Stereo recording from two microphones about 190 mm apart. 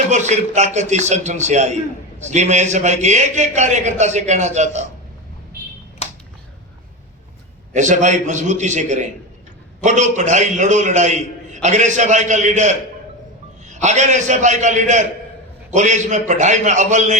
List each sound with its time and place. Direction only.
0.1 s a man's voice: 35° right (ahead or behind)
7.7 s a man's voice: 40° right (ahead or behind)